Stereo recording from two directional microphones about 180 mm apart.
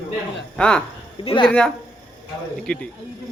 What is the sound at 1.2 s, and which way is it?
Speech, 25° left (ahead or behind).